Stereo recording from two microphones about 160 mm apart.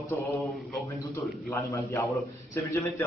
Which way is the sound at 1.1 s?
20° left (ahead or behind).